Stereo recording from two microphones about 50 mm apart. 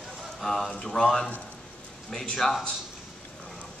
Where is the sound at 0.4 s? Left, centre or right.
Centre.